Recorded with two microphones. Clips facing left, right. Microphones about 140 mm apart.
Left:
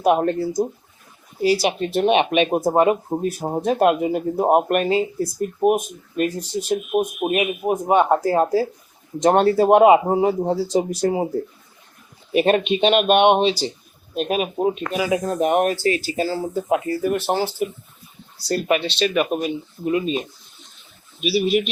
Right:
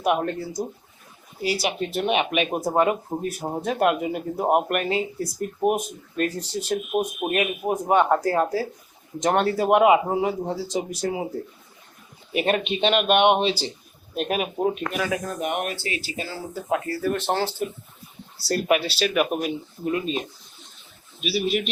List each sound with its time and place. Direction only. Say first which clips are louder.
0.0 s speech: left 6 dB; 35° left (ahead or behind)
2.0 s speech: left 6 dB; 30° left (ahead or behind)
5.5 s speech: left 4 dB; 20° left (ahead or behind); by 11.3 s 35° left (ahead or behind)
12.3 s speech: left 6 dB; 30° left (ahead or behind)
12.6 s speech: left 4 dB; 20° left (ahead or behind)
15.1 s speech: left 8 dB; 30° left (ahead or behind)
16.6 s speech: left 2 dB; 20° left (ahead or behind)
18.3 s speech: left 1 dB; centre (ahead or behind)
19.8 s speech: left 4 dB; 5° left (ahead or behind)
21.2 s speech: left 5 dB; centre (ahead or behind)